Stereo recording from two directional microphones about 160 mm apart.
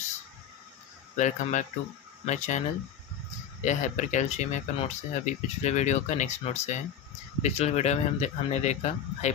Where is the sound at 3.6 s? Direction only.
50° left (ahead or behind).